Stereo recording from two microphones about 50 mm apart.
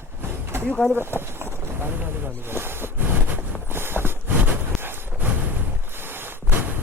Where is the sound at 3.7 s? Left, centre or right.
Right.